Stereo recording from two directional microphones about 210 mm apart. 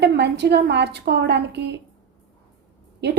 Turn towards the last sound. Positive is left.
turn(degrees=-55)  # may be behind; listen again after turning